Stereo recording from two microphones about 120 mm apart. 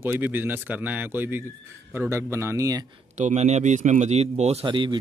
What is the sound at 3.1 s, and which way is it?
A man's voice, 75° right (ahead or behind).